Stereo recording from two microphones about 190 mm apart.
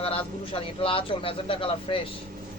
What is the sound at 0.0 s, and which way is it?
Speech, 30° left (ahead or behind).